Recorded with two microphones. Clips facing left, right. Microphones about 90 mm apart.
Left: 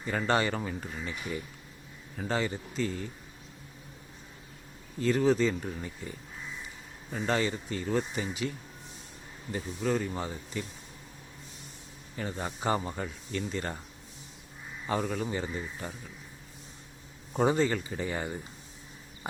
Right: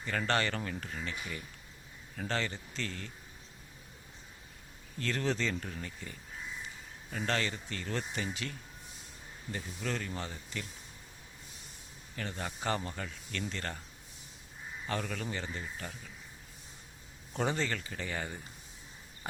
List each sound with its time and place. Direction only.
0.0 s speech: 15° left (ahead or behind)
2.1 s speech: 10° left (ahead or behind)
4.9 s speech: 10° left (ahead or behind)
12.1 s speech: 15° left (ahead or behind)
14.8 s speech: 15° left (ahead or behind)
17.3 s speech: 15° left (ahead or behind)